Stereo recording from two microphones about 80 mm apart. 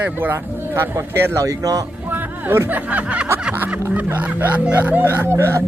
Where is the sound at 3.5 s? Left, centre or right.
Right.